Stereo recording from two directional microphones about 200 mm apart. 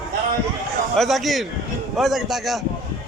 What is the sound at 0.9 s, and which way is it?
A man's voice, centre (ahead or behind).